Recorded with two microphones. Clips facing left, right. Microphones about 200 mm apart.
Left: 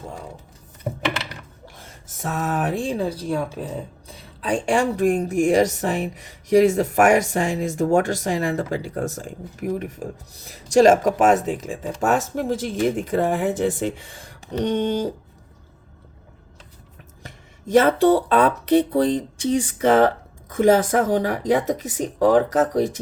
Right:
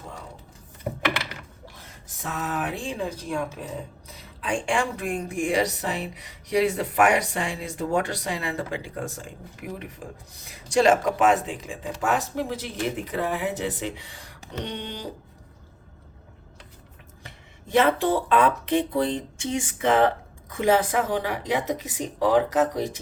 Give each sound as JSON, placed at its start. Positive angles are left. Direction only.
{"t": 2.1, "sound": "speech", "side_deg": 45}
{"t": 17.2, "sound": "speech", "side_deg": 40}